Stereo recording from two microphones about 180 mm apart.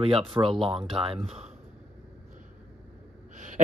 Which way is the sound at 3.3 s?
45° right (ahead or behind).